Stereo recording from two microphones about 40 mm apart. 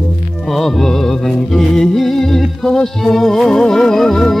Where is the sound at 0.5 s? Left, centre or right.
Centre.